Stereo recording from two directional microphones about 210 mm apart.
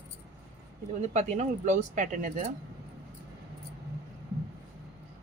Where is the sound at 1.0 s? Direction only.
35° right (ahead or behind).